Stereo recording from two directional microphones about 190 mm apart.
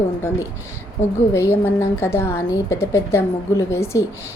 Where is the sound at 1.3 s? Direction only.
15° left (ahead or behind).